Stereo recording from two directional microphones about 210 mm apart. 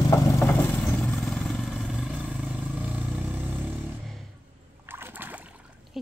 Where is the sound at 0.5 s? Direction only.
5° left (ahead or behind).